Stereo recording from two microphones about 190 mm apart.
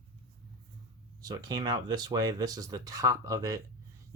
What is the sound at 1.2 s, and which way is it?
Speech, 20° right (ahead or behind).